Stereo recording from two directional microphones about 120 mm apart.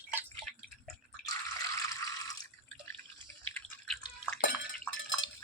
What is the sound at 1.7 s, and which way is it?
Water, 30° left (ahead or behind).